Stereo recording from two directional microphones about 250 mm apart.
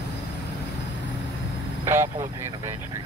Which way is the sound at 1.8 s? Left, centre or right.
Centre.